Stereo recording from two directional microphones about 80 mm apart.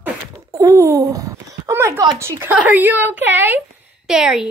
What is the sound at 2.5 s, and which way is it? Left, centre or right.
A woman's voice, centre.